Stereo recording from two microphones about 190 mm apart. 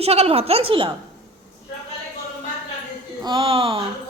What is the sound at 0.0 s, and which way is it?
Speech, 30° right (ahead or behind).